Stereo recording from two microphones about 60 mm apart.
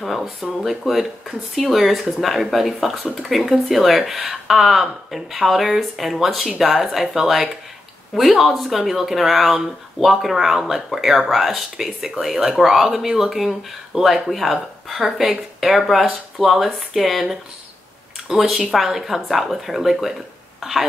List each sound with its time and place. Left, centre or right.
0.0 s speech: centre